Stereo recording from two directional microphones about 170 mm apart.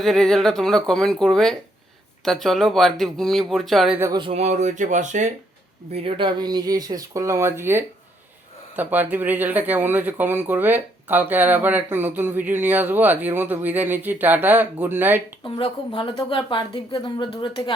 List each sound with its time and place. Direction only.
0.0 s speech: centre (ahead or behind)
4.1 s speech: 35° right (ahead or behind)
5.9 s speech: 35° right (ahead or behind); by 15.2 s 10° right (ahead or behind)
15.4 s a woman's voice: 30° left (ahead or behind)